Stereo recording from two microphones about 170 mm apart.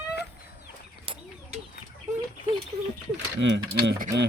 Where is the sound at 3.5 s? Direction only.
70° right (ahead or behind).